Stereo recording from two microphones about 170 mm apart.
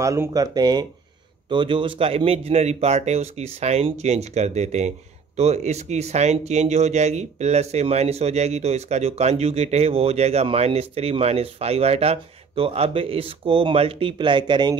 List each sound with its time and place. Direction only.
0.0 s speech: 20° right (ahead or behind)